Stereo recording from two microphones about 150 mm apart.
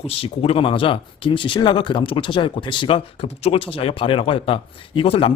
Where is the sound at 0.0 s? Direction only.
40° left (ahead or behind).